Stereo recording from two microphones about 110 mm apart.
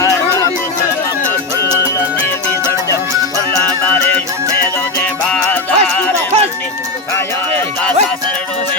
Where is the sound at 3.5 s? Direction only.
15° left (ahead or behind).